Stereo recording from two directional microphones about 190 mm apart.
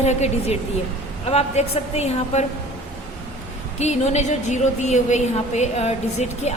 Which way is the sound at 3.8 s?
35° left (ahead or behind).